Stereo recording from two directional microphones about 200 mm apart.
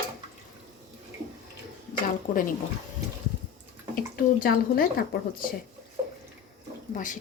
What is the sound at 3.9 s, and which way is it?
Speech, 45° left (ahead or behind).